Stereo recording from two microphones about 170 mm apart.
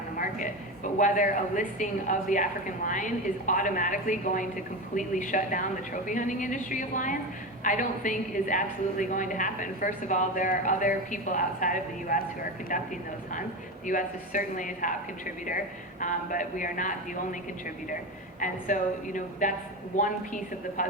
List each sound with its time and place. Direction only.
0.9 s a woman's voice: 50° left (ahead or behind)
18.3 s a woman's voice: 50° left (ahead or behind)